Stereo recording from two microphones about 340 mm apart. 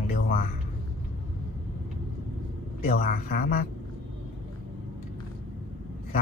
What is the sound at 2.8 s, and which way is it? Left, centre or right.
Speech, left.